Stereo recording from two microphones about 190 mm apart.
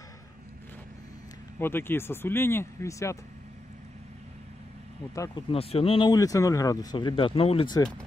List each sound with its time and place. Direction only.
1.6 s speech: 10° left (ahead or behind)
5.1 s speech: 15° left (ahead or behind)
5.5 s speech: 30° left (ahead or behind)